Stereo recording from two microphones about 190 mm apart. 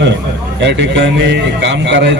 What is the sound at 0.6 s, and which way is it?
A man's voice, 65° right (ahead or behind).